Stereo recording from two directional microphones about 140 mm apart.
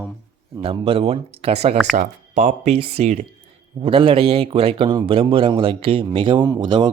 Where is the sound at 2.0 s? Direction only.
65° right (ahead or behind).